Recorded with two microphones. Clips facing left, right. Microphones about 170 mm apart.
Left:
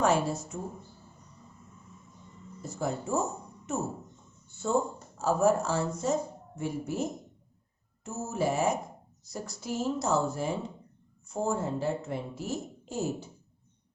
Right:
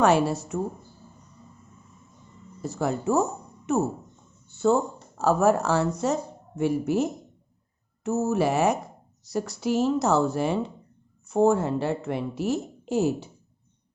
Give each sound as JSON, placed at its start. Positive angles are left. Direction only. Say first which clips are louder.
{"t": 0.0, "sound": "speech", "louder": "right 6 dB", "side_deg": -70}
{"t": 2.6, "sound": "speech", "louder": "right 6 dB", "side_deg": -70}